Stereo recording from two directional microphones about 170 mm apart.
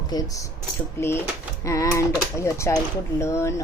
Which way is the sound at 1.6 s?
20° left (ahead or behind).